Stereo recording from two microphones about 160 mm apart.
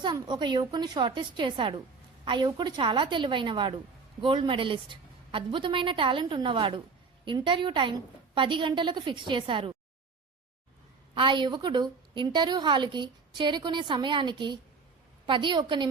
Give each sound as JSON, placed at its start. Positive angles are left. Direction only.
{"t": 0.0, "sound": "a woman's voice", "side_deg": -30}
{"t": 11.1, "sound": "a woman's voice", "side_deg": -30}